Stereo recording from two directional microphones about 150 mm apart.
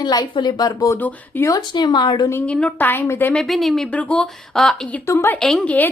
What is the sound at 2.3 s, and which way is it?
A woman's voice, 10° left (ahead or behind).